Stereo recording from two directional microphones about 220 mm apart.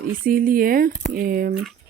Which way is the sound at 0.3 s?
40° right (ahead or behind).